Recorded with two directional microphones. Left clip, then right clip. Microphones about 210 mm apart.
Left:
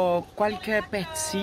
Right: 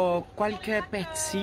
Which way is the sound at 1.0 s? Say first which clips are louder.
Left 1 dB; 50° left (ahead or behind).